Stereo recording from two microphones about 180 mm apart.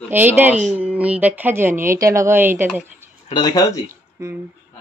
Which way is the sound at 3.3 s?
25° left (ahead or behind).